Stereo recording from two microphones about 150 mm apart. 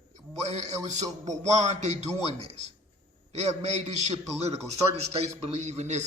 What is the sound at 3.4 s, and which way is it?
A man's voice, 50° right (ahead or behind).